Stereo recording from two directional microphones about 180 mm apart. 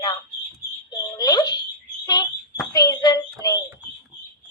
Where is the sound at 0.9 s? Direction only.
20° left (ahead or behind).